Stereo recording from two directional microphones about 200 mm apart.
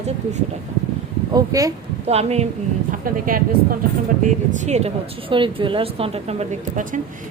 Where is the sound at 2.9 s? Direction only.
45° right (ahead or behind).